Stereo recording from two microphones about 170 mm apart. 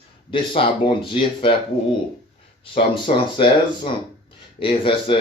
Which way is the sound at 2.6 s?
30° left (ahead or behind).